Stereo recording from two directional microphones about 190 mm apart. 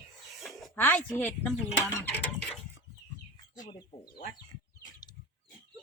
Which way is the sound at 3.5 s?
20° left (ahead or behind).